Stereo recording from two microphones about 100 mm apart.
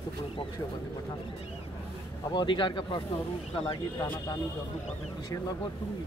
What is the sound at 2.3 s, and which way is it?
Speech, 55° left (ahead or behind).